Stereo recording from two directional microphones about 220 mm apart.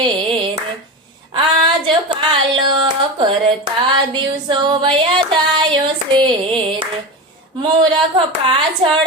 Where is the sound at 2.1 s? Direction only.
20° right (ahead or behind).